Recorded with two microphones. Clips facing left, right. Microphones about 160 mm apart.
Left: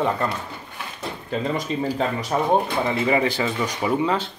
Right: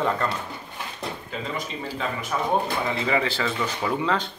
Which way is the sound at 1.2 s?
45° left (ahead or behind).